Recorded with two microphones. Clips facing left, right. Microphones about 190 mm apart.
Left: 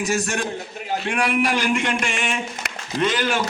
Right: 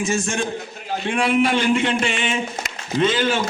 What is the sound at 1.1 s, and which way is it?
A man's voice, 30° right (ahead or behind).